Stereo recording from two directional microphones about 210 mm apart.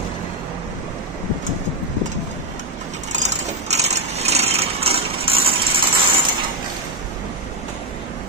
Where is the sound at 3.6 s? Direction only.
30° right (ahead or behind).